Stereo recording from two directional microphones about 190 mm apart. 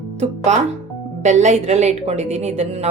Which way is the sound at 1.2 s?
35° right (ahead or behind).